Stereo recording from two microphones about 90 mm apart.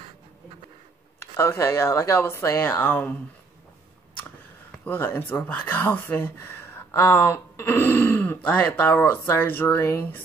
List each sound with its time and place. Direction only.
1.2 s speech: 30° left (ahead or behind)
4.8 s speech: 20° left (ahead or behind)